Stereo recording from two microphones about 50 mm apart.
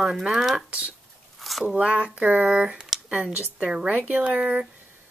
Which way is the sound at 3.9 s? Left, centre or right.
Right.